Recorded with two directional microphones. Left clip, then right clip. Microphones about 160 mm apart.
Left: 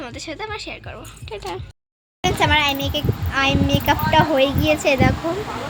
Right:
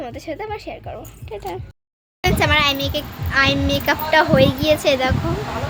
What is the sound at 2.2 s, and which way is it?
A child's voice, 10° right (ahead or behind).